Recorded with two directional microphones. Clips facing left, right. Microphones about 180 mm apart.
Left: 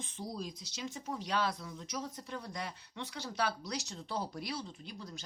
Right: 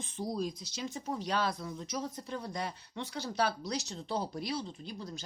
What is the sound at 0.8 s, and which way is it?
Speech, 35° right (ahead or behind).